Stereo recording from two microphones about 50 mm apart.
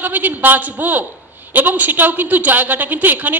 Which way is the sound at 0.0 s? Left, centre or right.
Right.